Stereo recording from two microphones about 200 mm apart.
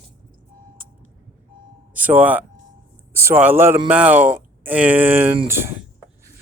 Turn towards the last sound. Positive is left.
turn(degrees=-10)  # may be behind; listen again after turning